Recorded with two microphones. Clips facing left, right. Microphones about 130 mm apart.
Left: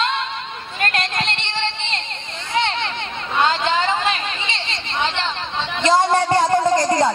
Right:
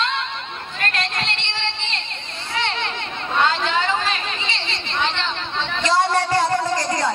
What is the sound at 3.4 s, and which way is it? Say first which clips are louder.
Chatter: left 4 dB; 25° left (ahead or behind).